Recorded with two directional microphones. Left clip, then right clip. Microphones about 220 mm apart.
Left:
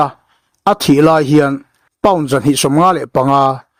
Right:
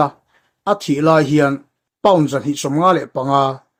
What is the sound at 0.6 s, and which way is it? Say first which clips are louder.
Speech: left 6 dB; 40° left (ahead or behind).